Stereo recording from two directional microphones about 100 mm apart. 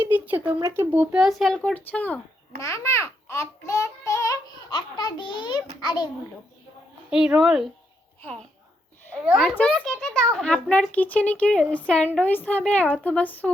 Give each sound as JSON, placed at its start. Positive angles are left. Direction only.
{"t": 0.0, "sound": "speech", "side_deg": -20}
{"t": 1.1, "sound": "speech", "side_deg": 0}
{"t": 1.7, "sound": "a child's voice", "side_deg": 15}
{"t": 2.6, "sound": "babbling", "side_deg": 30}
{"t": 4.7, "sound": "a child's voice", "side_deg": 45}
{"t": 7.1, "sound": "speech", "side_deg": -5}
{"t": 8.2, "sound": "a child's voice", "side_deg": 10}
{"t": 9.6, "sound": "a child's voice", "side_deg": 10}